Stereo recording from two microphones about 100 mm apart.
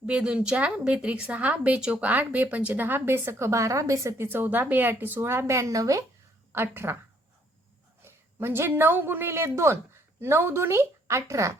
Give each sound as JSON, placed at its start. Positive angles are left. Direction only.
{"t": 0.0, "sound": "a woman's voice", "side_deg": -10}
{"t": 4.3, "sound": "speech", "side_deg": -20}
{"t": 8.0, "sound": "a woman's voice", "side_deg": -25}